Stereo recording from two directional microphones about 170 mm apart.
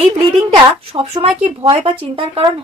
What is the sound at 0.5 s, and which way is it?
Speech, 30° right (ahead or behind).